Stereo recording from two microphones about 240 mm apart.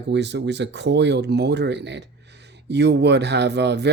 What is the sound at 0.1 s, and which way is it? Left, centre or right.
Speech, right.